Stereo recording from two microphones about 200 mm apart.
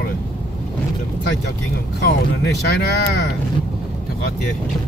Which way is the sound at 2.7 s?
55° left (ahead or behind).